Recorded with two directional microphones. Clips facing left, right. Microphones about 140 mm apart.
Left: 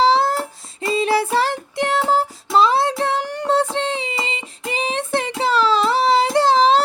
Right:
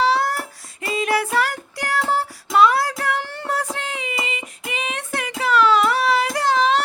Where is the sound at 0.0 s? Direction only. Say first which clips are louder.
Left 4 dB; 25° left (ahead or behind).